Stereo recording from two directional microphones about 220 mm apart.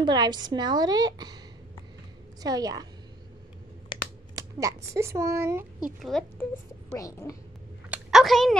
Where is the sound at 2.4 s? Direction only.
15° right (ahead or behind).